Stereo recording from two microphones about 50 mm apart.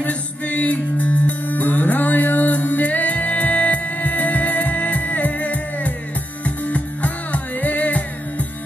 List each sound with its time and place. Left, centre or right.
0.0 s music: left